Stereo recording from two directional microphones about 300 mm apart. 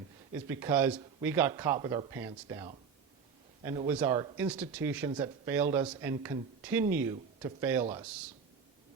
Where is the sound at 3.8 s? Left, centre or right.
Centre.